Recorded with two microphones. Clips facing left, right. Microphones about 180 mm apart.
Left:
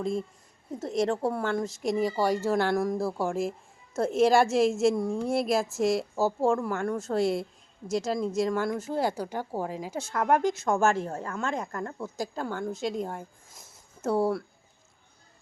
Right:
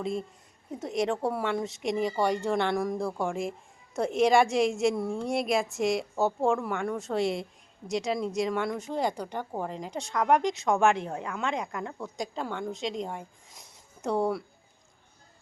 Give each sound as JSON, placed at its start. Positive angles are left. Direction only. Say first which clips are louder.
{"t": 0.0, "sound": "a woman's voice", "louder": "left 2 dB", "side_deg": 0}
{"t": 10.9, "sound": "a woman's voice", "louder": "left 2 dB", "side_deg": -15}
{"t": 11.8, "sound": "a woman's voice", "louder": "left 2 dB", "side_deg": 0}